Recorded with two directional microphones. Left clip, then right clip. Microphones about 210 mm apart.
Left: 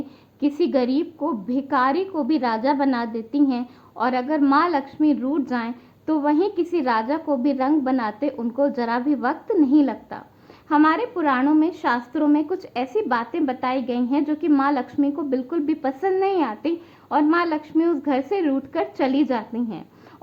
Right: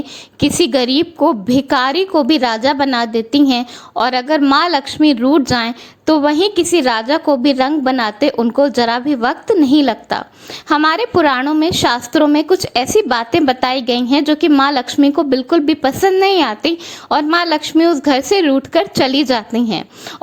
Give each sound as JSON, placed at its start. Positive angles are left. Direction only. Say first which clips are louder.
{"t": 0.3, "sound": "a woman's voice", "louder": "right 7 dB", "side_deg": -35}